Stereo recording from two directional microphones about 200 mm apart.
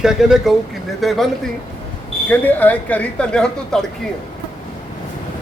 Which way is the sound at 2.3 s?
10° left (ahead or behind).